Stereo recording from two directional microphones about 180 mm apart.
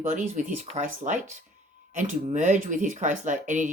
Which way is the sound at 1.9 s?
45° right (ahead or behind).